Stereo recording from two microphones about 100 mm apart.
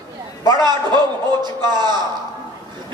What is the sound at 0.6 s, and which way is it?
A man's voice, 45° right (ahead or behind).